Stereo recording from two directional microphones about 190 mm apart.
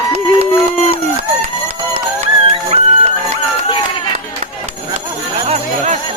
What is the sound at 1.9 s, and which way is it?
Music, 30° right (ahead or behind).